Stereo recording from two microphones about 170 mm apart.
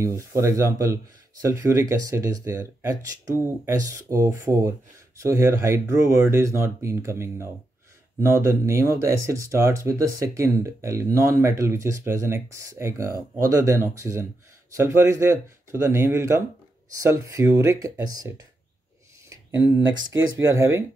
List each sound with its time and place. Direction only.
0.0 s speech: 15° right (ahead or behind)
19.2 s a sound: 15° right (ahead or behind)
19.8 s speech: 90° right
20.3 s speech: 15° right (ahead or behind)